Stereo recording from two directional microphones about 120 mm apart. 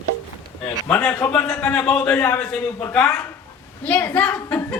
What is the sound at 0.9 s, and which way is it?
A man's voice, 15° left (ahead or behind).